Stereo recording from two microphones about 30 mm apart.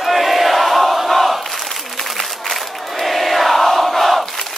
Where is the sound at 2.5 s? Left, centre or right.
Centre.